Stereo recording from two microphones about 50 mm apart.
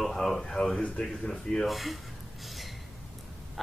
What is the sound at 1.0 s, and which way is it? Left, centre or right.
Speech, left.